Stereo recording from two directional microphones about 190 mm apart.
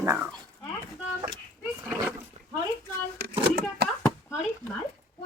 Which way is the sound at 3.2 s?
55° right (ahead or behind).